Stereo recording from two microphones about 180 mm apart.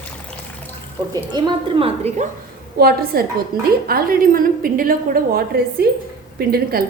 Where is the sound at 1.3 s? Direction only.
30° right (ahead or behind).